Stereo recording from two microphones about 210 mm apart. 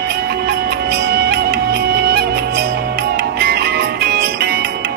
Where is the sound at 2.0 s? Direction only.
50° right (ahead or behind).